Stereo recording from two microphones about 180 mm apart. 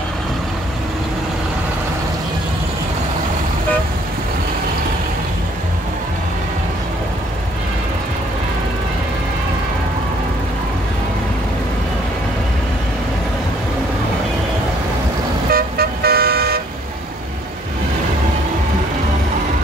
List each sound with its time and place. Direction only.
15.5 s vehicle: 60° right (ahead or behind)